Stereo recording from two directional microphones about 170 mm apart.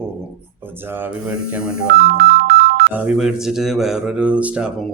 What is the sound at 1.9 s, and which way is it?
Music, 60° right (ahead or behind).